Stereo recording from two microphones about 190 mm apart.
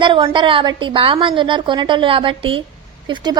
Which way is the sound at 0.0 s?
25° right (ahead or behind).